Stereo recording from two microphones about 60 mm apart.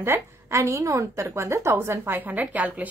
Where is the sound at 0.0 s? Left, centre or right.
Right.